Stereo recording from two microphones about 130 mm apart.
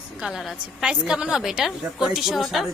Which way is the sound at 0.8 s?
5° right (ahead or behind).